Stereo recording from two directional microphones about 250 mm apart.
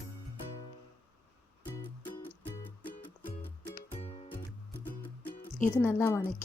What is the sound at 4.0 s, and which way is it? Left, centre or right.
Music, left.